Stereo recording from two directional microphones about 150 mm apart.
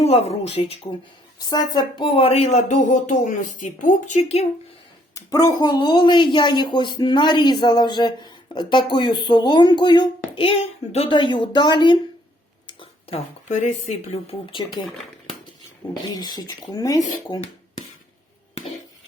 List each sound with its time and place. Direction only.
0.0 s speech: 45° left (ahead or behind)
1.5 s speech: 25° left (ahead or behind); by 4.4 s 50° left (ahead or behind)
5.1 s speech: 25° left (ahead or behind); by 14.3 s 45° left (ahead or behind)
14.6 s speech: 30° left (ahead or behind)
16.1 s speech: 25° left (ahead or behind)